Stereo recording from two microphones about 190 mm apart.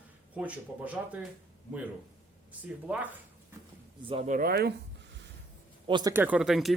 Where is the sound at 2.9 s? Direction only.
5° right (ahead or behind).